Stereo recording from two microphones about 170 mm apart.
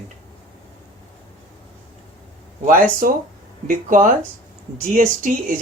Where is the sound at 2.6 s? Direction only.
55° right (ahead or behind).